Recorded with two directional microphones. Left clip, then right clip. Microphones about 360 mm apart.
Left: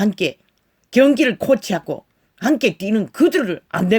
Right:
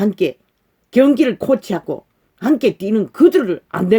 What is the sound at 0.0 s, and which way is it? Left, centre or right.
Speech, left.